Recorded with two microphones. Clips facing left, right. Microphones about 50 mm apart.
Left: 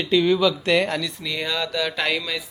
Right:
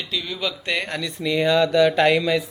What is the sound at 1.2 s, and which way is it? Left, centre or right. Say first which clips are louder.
Speech: right 11 dB; centre.